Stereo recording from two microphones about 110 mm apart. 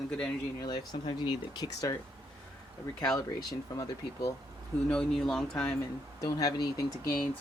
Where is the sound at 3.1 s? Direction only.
35° left (ahead or behind).